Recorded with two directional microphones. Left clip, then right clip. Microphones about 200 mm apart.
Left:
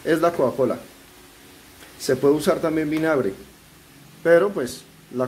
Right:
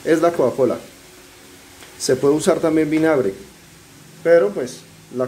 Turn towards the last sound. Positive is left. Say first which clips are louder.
# right 2 dB
turn(degrees=15)  # may be behind; listen again after turning